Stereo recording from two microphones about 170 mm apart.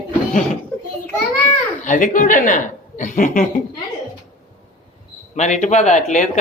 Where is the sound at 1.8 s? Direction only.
50° left (ahead or behind).